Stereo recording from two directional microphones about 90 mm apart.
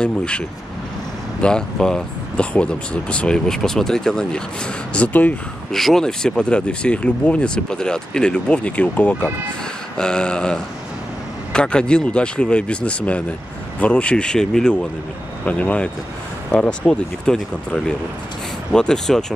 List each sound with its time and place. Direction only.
0.0 s speech: 10° left (ahead or behind)
5.7 s speech: 5° left (ahead or behind)
18.7 s speech: 5° left (ahead or behind)